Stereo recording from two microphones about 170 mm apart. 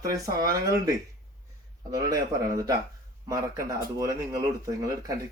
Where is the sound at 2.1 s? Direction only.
20° right (ahead or behind).